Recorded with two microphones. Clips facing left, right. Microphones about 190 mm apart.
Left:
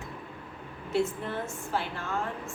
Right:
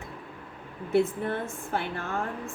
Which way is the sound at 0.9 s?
55° right (ahead or behind).